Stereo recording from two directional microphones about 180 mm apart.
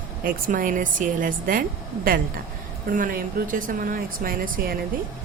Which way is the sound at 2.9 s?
50° right (ahead or behind).